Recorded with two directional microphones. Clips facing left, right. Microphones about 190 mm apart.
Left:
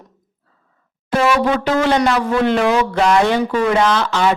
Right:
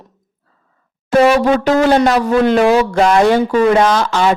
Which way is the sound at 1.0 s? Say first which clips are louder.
Right 5 dB; 40° right (ahead or behind).